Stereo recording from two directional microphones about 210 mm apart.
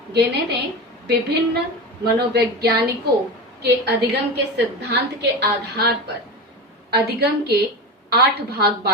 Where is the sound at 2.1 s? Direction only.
50° right (ahead or behind).